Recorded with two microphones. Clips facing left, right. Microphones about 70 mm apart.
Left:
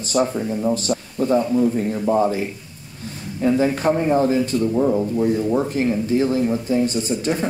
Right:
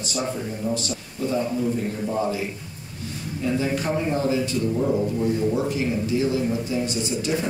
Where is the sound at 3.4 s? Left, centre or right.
Left.